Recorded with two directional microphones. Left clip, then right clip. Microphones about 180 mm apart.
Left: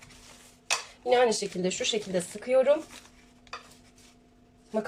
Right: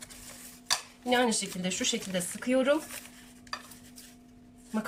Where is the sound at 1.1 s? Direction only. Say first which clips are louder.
Left 4 dB; 35° left (ahead or behind).